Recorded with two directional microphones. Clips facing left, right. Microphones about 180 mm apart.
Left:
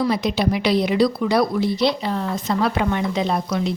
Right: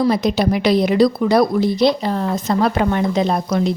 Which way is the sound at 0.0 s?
45° right (ahead or behind).